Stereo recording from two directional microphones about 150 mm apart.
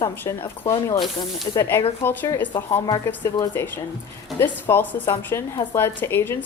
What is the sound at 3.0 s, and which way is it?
Speech, 15° left (ahead or behind).